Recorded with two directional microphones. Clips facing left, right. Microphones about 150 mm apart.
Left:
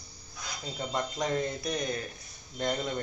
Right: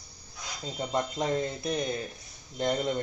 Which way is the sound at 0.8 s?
25° right (ahead or behind).